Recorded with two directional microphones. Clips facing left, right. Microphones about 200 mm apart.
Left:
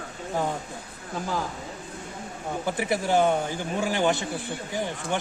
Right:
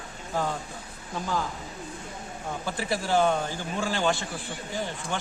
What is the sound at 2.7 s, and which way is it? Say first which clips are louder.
A man's voice: left 3 dB; 20° left (ahead or behind).